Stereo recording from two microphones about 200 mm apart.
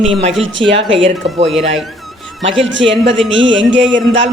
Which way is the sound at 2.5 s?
65° right (ahead or behind).